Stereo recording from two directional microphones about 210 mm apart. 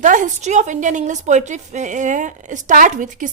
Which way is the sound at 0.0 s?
40° right (ahead or behind).